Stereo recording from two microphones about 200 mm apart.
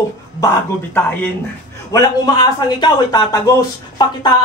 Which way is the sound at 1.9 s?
20° left (ahead or behind).